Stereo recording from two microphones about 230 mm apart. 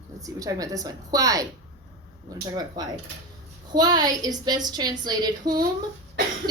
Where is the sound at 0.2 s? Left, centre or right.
Centre.